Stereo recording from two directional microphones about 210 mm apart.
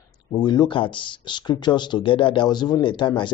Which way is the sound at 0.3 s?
20° left (ahead or behind).